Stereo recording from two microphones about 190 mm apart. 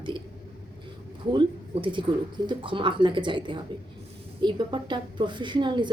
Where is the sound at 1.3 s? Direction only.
25° right (ahead or behind).